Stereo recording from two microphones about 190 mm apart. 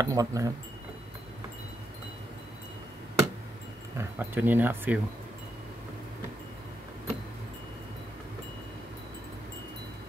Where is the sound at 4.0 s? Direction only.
10° right (ahead or behind).